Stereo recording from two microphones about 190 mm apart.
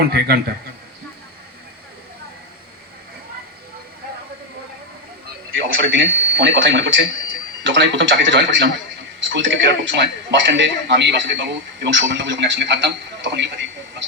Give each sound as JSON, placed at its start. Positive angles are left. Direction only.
{"t": 0.0, "sound": "a man's voice", "side_deg": -55}
{"t": 5.6, "sound": "a man's voice", "side_deg": -85}